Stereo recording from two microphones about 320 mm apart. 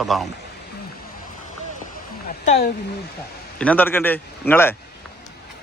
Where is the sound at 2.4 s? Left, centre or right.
Left.